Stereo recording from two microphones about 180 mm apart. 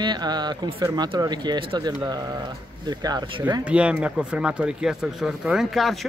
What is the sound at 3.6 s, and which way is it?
Speech, 5° right (ahead or behind).